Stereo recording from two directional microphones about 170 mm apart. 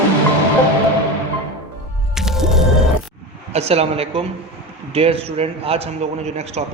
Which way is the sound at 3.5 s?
35° right (ahead or behind).